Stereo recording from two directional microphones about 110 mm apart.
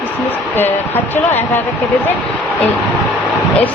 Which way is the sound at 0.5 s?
20° left (ahead or behind).